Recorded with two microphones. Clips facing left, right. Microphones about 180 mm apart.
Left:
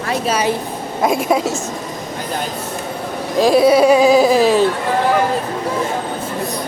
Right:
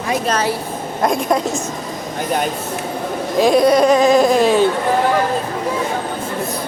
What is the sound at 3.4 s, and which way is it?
Speech, centre (ahead or behind).